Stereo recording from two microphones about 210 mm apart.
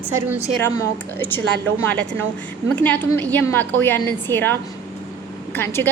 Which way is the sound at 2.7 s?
10° left (ahead or behind).